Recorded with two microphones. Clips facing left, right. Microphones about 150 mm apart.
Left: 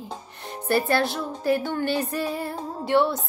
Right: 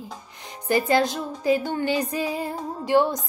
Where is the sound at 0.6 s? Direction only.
15° right (ahead or behind).